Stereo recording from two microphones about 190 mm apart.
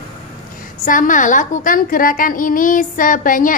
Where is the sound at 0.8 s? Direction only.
45° left (ahead or behind).